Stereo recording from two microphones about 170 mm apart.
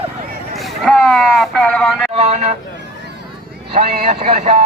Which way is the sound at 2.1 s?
40° right (ahead or behind).